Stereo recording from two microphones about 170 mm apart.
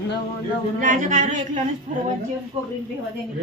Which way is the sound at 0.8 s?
45° right (ahead or behind).